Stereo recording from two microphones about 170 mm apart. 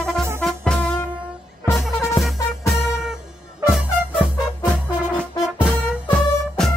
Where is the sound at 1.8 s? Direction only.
15° left (ahead or behind).